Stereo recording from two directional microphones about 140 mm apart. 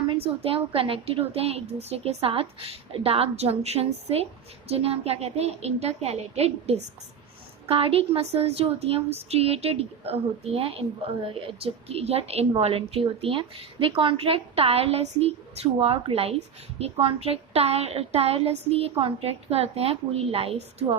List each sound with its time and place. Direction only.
0.1 s a woman's voice: 45° right (ahead or behind)